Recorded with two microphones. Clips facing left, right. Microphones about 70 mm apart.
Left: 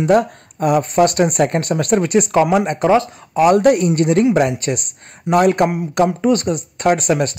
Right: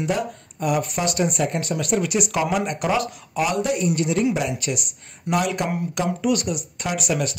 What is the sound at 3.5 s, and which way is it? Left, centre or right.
Speech, left.